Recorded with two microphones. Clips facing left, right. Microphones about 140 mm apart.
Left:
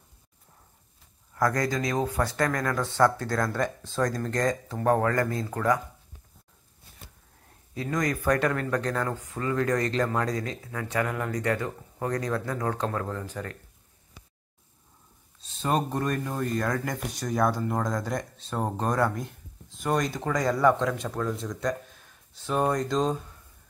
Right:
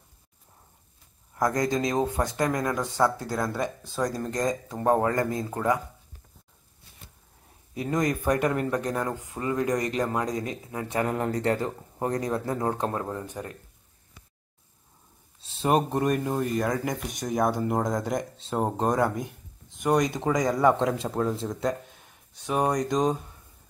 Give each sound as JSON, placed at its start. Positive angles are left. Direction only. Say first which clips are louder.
{"t": 1.3, "sound": "speech", "louder": "right 1 dB", "side_deg": -20}
{"t": 7.7, "sound": "speech", "louder": "right 2 dB", "side_deg": -20}
{"t": 15.4, "sound": "speech", "louder": "right 3 dB", "side_deg": -25}